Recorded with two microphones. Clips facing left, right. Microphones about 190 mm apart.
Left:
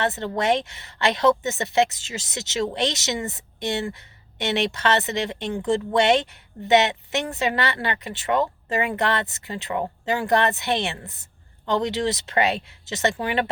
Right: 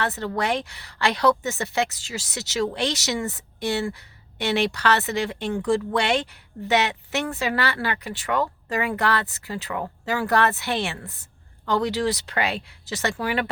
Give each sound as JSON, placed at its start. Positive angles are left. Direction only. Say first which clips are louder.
{"t": 0.0, "sound": "a woman's voice", "louder": "left 2 dB", "side_deg": 20}